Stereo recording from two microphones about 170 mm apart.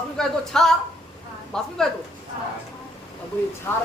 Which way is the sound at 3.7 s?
15° left (ahead or behind).